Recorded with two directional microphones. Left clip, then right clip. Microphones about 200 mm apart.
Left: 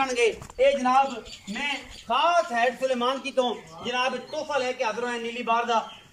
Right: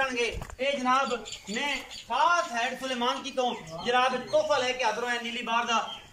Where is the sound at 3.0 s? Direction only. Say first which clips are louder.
Left 4 dB; 5° left (ahead or behind).